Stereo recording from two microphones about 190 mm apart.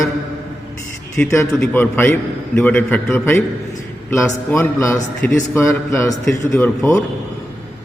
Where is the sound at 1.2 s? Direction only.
15° left (ahead or behind).